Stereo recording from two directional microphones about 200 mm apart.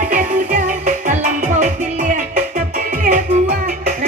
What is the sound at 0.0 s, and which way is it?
Music, 40° right (ahead or behind).